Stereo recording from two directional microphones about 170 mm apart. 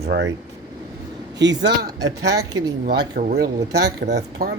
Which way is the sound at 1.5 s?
20° right (ahead or behind).